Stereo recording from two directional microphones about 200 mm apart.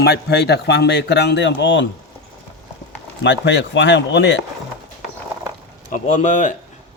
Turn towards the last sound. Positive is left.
turn(degrees=40)  # may be behind; listen again after turning